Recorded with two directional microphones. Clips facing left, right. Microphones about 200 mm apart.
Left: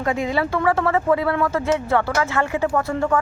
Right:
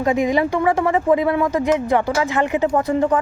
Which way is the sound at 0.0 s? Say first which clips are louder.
Right 4 dB; 20° right (ahead or behind).